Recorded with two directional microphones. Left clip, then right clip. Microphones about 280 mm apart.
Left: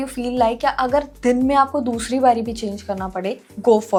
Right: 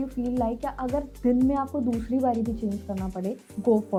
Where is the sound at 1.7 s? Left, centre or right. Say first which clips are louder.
Left 7 dB; left.